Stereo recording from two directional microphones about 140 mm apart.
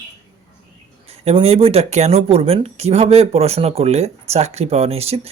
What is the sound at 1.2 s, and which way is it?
Speech, 45° right (ahead or behind).